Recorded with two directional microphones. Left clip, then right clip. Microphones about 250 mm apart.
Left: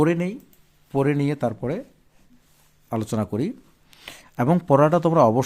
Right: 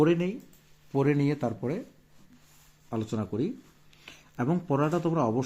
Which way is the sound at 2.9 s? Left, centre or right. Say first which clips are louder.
Left 6 dB; left.